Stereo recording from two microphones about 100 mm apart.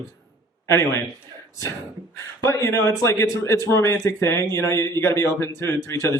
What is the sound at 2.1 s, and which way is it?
Speech, 30° left (ahead or behind).